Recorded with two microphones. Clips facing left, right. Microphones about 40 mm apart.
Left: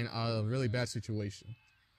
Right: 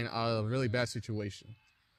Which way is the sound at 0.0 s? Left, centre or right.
Right.